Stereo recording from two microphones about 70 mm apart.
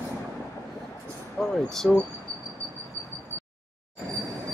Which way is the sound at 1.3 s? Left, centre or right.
Centre.